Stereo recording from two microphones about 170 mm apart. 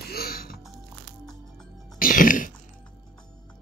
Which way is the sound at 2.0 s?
55° left (ahead or behind).